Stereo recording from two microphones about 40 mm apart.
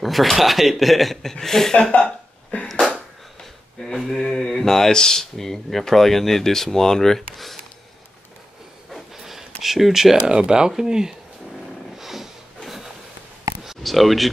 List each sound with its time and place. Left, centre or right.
0.0 s speech: centre
3.8 s speech: centre
8.9 s a sound: centre
10.2 s speech: right
12.0 s snort: centre
12.6 s a sound: centre
13.8 s speech: centre